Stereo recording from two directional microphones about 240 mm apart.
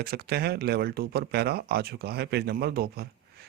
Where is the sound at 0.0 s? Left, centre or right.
Right.